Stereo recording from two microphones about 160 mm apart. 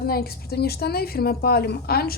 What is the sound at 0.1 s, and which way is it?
A woman's voice, 75° left (ahead or behind).